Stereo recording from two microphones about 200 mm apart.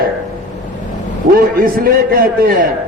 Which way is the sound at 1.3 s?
45° right (ahead or behind).